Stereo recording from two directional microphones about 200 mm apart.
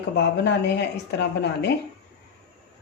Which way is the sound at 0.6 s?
60° left (ahead or behind).